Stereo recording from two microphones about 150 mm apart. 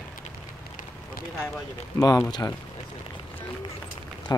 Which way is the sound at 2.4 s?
20° left (ahead or behind).